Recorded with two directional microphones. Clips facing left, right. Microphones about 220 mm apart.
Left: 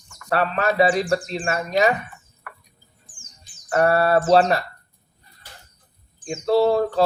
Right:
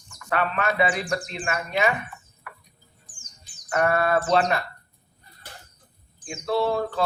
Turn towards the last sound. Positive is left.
turn(degrees=35)  # may be behind; listen again after turning